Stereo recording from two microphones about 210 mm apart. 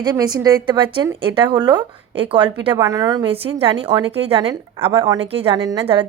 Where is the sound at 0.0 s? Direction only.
20° right (ahead or behind).